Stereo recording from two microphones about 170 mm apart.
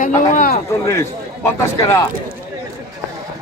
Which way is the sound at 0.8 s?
15° left (ahead or behind).